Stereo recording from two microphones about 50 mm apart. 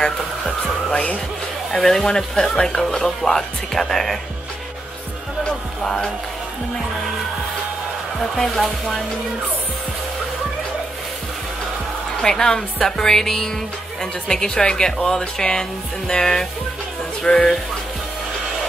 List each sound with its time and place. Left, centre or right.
0.9 s speech: left
1.7 s speech: centre
5.4 s speech: centre
8.4 s speech: centre
12.2 s speech: centre